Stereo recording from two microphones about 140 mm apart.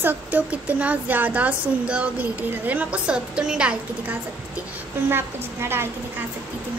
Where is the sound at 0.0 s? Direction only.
10° right (ahead or behind).